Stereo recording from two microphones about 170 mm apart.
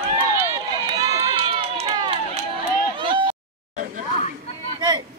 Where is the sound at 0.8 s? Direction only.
25° right (ahead or behind).